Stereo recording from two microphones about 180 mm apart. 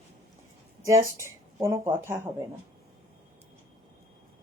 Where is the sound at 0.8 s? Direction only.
15° right (ahead or behind).